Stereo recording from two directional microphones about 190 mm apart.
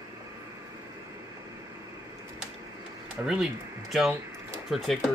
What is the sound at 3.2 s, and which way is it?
Speech, centre (ahead or behind).